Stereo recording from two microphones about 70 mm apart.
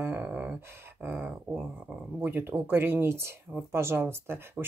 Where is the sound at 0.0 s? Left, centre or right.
Right.